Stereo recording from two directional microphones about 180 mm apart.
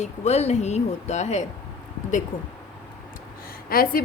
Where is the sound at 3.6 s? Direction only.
55° left (ahead or behind).